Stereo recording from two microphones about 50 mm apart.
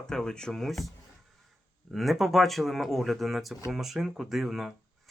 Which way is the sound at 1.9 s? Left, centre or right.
Centre.